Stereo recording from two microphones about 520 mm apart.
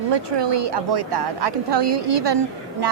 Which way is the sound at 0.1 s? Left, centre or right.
Right.